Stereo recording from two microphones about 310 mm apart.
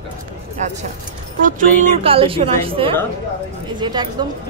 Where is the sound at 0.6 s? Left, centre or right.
Right.